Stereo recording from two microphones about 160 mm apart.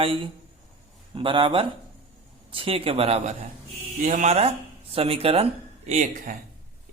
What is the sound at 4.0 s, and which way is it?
Speech, 55° right (ahead or behind).